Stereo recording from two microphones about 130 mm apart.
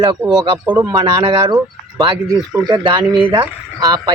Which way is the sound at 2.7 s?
40° right (ahead or behind).